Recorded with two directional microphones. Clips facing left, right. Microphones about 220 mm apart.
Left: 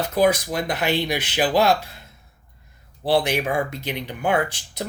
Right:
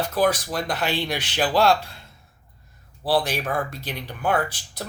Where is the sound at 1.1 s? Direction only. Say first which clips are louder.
Left 2 dB; 10° left (ahead or behind).